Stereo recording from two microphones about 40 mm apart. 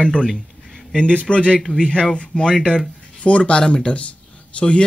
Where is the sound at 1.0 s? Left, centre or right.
Left.